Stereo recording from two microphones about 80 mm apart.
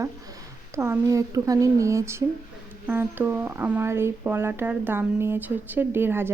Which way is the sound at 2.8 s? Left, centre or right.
Right.